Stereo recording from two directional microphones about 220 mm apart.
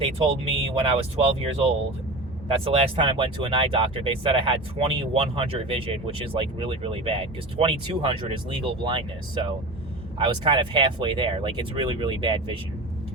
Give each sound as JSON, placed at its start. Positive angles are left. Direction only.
{"t": 0.4, "sound": "speech", "side_deg": -25}